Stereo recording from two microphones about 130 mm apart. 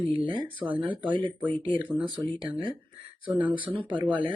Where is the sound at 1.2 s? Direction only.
40° right (ahead or behind).